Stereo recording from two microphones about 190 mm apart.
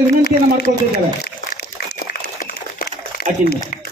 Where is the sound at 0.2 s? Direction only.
60° left (ahead or behind).